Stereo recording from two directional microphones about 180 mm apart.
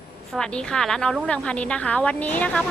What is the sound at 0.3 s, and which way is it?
A woman's voice, 5° left (ahead or behind).